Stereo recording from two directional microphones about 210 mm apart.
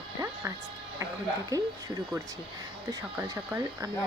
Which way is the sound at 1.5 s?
15° right (ahead or behind).